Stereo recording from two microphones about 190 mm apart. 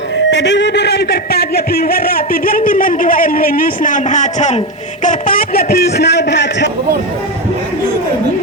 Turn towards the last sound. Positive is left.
turn(degrees=65)  # may be behind; listen again after turning